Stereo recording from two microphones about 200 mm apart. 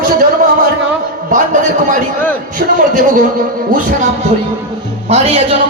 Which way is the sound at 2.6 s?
40° right (ahead or behind).